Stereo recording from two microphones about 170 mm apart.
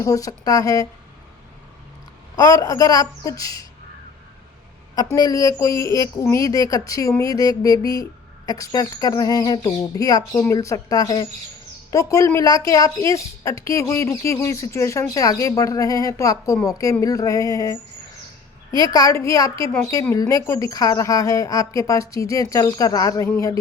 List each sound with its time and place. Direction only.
0.0 s speech: 20° left (ahead or behind)
2.3 s speech: 20° left (ahead or behind)
5.1 s speech: 20° left (ahead or behind)
18.9 s speech: 20° left (ahead or behind)